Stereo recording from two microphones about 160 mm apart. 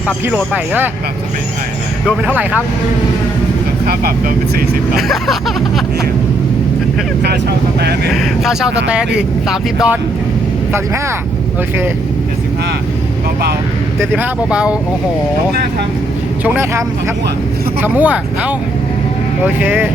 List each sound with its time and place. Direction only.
0.5 s speech: 10° right (ahead or behind)
2.0 s speech: 10° right (ahead or behind)
4.9 s speech: centre (ahead or behind)
8.1 s speech: centre (ahead or behind)
14.0 s speech: 10° right (ahead or behind)
16.4 s speech: 15° right (ahead or behind)
17.8 s speech: 10° right (ahead or behind)
19.5 s speech: 10° right (ahead or behind)